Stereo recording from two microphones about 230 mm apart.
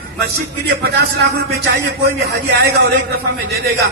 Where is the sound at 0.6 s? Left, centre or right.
Right.